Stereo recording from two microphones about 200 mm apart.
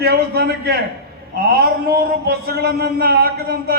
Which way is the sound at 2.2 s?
50° right (ahead or behind).